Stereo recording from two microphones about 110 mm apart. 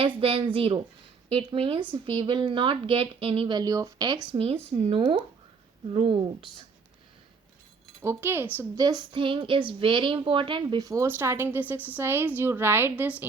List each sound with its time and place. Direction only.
0.2 s a woman's voice: 55° right (ahead or behind)
3.6 s speech: 30° right (ahead or behind)
4.3 s a woman's voice: 60° right (ahead or behind)
8.0 s a woman's voice: 20° right (ahead or behind)
8.8 s speech: 35° right (ahead or behind)
9.1 s a woman's voice: 50° right (ahead or behind)
10.8 s a woman's voice: 25° right (ahead or behind)